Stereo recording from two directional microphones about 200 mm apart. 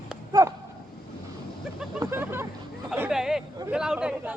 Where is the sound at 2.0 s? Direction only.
10° right (ahead or behind).